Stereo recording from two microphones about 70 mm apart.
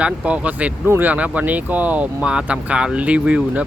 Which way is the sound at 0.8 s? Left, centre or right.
Right.